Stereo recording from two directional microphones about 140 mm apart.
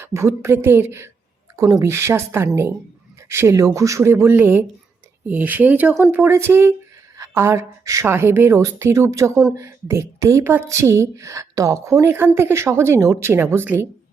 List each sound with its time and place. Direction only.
0.0 s a woman's voice: 20° right (ahead or behind)